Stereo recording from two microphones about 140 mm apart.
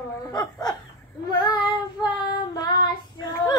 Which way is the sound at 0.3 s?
25° left (ahead or behind).